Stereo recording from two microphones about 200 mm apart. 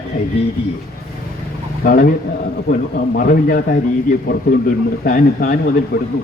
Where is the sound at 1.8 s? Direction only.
45° left (ahead or behind).